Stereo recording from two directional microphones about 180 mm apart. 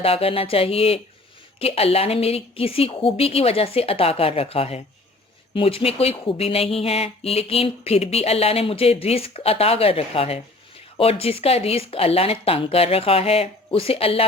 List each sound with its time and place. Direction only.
0.0 s speech: 30° left (ahead or behind)